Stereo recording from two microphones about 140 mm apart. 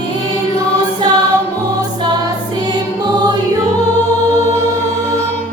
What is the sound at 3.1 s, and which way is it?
Music, 30° right (ahead or behind).